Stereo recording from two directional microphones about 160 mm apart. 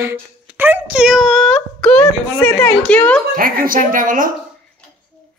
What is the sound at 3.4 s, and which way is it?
Speech, 60° right (ahead or behind).